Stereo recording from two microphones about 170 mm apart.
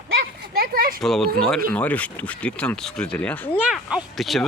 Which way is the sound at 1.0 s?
Centre (ahead or behind).